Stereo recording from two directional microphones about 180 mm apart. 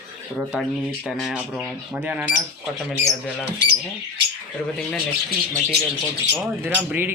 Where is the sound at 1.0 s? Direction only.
Centre (ahead or behind).